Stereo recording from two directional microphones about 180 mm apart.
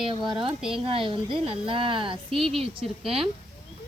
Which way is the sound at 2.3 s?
Centre (ahead or behind).